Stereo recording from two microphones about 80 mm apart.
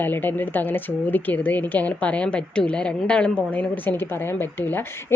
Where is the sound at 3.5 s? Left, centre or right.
Left.